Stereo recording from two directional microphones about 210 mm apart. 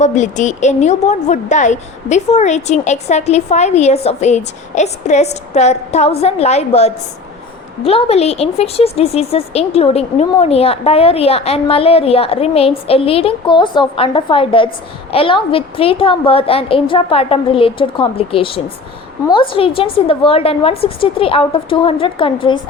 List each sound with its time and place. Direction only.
0.0 s a woman's voice: 35° left (ahead or behind)